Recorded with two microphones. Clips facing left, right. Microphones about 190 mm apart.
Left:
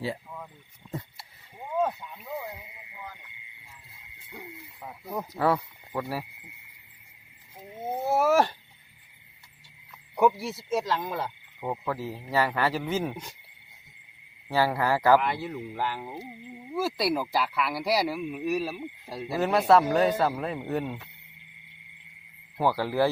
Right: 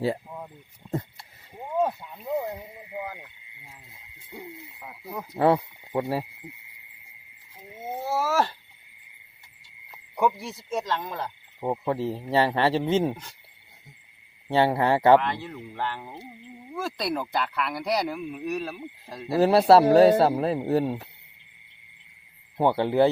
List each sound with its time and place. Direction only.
2.4 s clip-clop: 45° right (ahead or behind)
4.3 s owl: centre (ahead or behind)
5.3 s speech: 25° right (ahead or behind)
7.9 s a sound: 20° left (ahead or behind)
8.3 s speech: 15° left (ahead or behind)
10.2 s speech: 5° left (ahead or behind)
11.6 s speech: 25° right (ahead or behind)
14.4 s speech: 25° right (ahead or behind)
15.2 s speech: 10° left (ahead or behind)
19.4 s speech: 35° right (ahead or behind)
22.5 s speech: 25° right (ahead or behind)